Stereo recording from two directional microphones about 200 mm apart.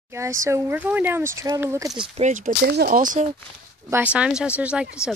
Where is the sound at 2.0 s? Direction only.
35° right (ahead or behind).